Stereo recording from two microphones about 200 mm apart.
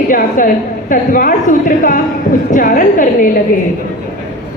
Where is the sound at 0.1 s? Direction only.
40° left (ahead or behind).